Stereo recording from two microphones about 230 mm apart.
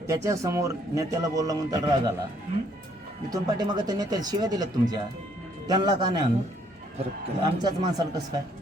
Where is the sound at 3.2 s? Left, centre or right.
Centre.